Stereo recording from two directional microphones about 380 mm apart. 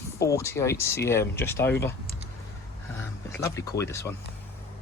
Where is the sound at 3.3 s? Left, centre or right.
Centre.